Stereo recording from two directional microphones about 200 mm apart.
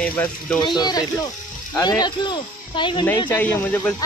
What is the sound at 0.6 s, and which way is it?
Speech, 20° left (ahead or behind).